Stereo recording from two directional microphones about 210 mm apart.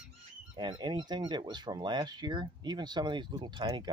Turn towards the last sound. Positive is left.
turn(degrees=-20)  # may be behind; listen again after turning